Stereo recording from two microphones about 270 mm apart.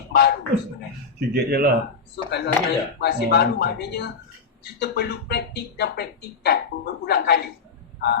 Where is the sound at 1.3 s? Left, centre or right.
Right.